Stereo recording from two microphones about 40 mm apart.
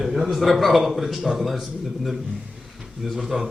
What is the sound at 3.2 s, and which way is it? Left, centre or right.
Speech, centre.